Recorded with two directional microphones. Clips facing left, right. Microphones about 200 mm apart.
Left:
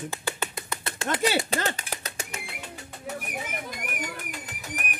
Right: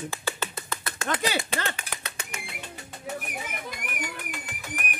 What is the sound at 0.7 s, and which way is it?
Bird, 30° left (ahead or behind).